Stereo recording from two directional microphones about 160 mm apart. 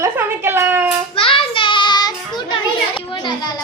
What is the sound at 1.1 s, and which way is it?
Child singing, 35° left (ahead or behind).